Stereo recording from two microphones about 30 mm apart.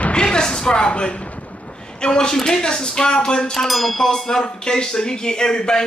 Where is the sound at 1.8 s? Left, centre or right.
Left.